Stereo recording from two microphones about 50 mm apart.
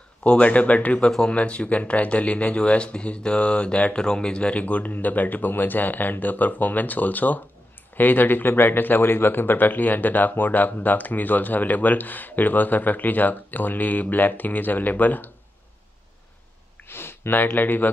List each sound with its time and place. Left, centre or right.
0.2 s speech: left
16.9 s speech: left